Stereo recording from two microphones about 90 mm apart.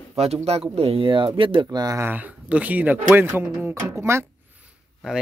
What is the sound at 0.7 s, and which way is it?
Speech, 90° right.